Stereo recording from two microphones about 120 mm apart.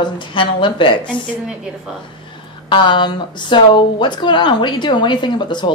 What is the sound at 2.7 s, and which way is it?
Speech, 40° left (ahead or behind).